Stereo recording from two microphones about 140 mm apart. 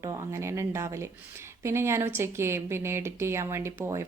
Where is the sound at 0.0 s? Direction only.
20° right (ahead or behind).